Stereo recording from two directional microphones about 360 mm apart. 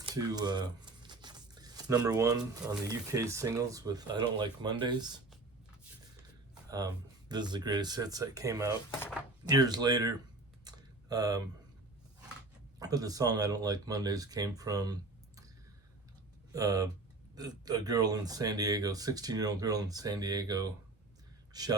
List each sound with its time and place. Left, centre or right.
0.0 s speech: centre
6.5 s speech: centre
8.9 s speech: centre
9.5 s speech: centre
10.6 s typing: centre
12.8 s speech: centre
16.5 s speech: centre